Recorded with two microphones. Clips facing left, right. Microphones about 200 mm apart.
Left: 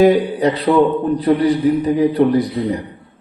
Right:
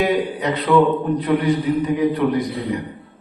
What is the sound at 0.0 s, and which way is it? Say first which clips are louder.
A man's voice: left 7 dB; 35° left (ahead or behind).